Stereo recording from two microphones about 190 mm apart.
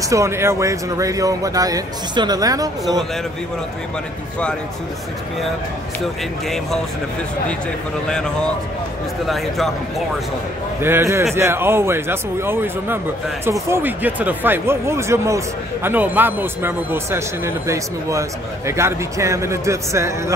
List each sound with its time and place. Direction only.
0.1 s speech: 15° right (ahead or behind)
8.1 s speech: 5° left (ahead or behind)
10.8 s speech: 10° right (ahead or behind)
18.7 s speech: 15° right (ahead or behind)